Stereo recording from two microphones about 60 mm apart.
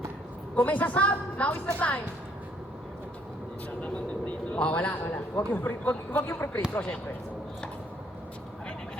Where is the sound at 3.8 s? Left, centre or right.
Left.